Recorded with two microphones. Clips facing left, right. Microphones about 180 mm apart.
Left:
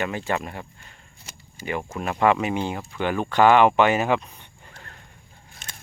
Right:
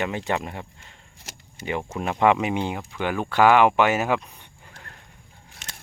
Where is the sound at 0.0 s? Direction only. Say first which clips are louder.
Even; 20° right (ahead or behind).